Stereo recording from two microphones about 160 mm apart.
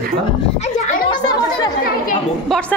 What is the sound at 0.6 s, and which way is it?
Speech, 55° left (ahead or behind).